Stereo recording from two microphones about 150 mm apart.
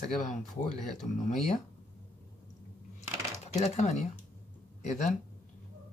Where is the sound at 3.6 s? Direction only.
50° left (ahead or behind).